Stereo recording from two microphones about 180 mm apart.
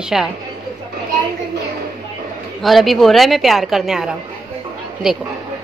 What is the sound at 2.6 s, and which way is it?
A woman's voice, centre (ahead or behind).